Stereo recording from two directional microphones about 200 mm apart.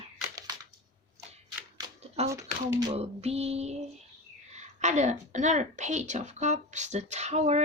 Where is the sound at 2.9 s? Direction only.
30° right (ahead or behind).